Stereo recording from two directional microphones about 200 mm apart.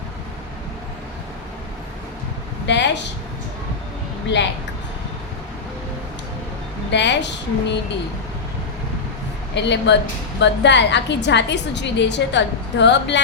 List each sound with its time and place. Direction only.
2.6 s speech: 60° left (ahead or behind)
6.9 s a woman's voice: 60° left (ahead or behind)
9.6 s a woman's voice: 60° left (ahead or behind)